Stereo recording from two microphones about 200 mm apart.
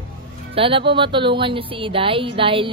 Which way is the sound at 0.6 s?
25° right (ahead or behind).